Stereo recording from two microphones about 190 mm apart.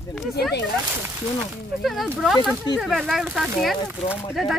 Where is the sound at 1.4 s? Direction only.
Centre (ahead or behind).